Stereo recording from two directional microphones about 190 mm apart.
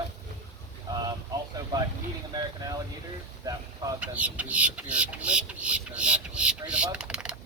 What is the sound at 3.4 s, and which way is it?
Speech, 20° right (ahead or behind).